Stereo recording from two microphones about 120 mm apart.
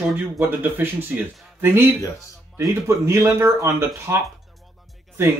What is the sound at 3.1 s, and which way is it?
A man's voice, 25° right (ahead or behind).